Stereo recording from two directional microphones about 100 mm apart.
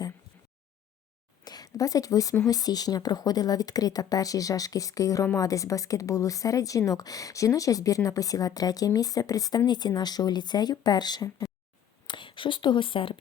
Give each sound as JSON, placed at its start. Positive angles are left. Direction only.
{"t": 1.5, "sound": "a woman's voice", "side_deg": 40}
{"t": 12.0, "sound": "speech", "side_deg": 55}